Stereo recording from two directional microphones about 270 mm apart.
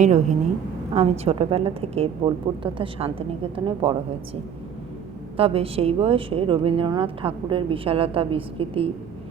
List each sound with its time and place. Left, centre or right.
0.0 s speech: right
5.4 s speech: right